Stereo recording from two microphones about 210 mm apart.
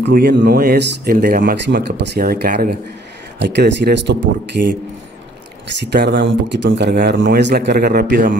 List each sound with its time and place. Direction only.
0.0 s speech: 50° right (ahead or behind)
3.3 s speech: 55° right (ahead or behind)
5.9 s speech: 55° right (ahead or behind)